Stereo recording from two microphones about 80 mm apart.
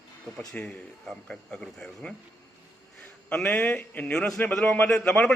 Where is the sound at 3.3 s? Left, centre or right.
Centre.